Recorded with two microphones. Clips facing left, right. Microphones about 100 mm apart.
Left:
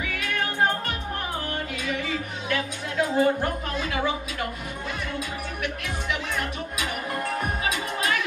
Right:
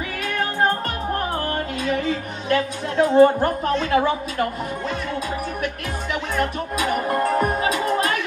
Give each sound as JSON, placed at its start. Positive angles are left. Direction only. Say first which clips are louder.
{"t": 2.5, "sound": "speech", "louder": "right 7 dB", "side_deg": -40}
{"t": 6.3, "sound": "speech", "louder": "right 7 dB", "side_deg": -40}